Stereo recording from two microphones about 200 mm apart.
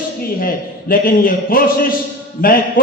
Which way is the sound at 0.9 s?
45° left (ahead or behind).